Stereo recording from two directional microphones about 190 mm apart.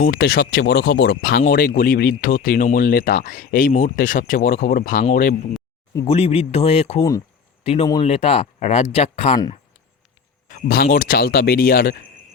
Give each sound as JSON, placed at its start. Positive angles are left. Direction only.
{"t": 0.0, "sound": "speech", "side_deg": 55}
{"t": 6.1, "sound": "speech", "side_deg": 30}
{"t": 10.5, "sound": "speech", "side_deg": 45}